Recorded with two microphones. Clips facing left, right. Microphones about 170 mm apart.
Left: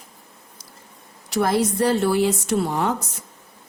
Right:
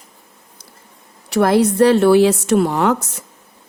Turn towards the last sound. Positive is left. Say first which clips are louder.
# right 6 dB
turn(degrees=-75)  # may be behind; listen again after turning